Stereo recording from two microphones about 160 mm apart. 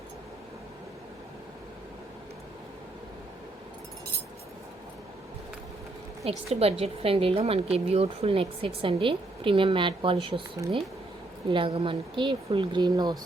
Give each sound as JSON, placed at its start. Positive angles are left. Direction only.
{"t": 6.2, "sound": "a woman's voice", "side_deg": -40}
{"t": 11.4, "sound": "a woman's voice", "side_deg": -30}